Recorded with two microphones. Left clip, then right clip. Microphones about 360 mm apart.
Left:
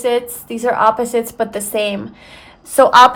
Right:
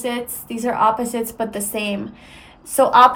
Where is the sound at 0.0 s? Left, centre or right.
Left.